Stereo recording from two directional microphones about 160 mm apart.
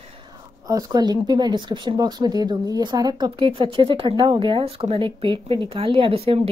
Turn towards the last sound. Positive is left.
turn(degrees=-35)  # may be behind; listen again after turning